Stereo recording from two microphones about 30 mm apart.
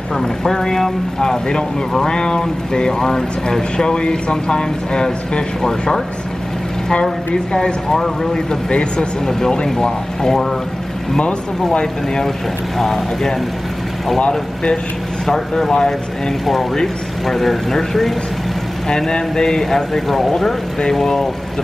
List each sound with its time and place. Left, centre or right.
0.1 s speech: centre
2.0 s speech: left
3.7 s speech: left
7.5 s speech: left
8.0 s speech: centre
8.6 s speech: left
9.2 s speech: centre
12.7 s speech: centre
15.2 s speech: centre
18.9 s speech: left
19.6 s speech: centre